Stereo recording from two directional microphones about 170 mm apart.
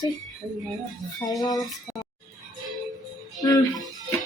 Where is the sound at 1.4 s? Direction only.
20° left (ahead or behind).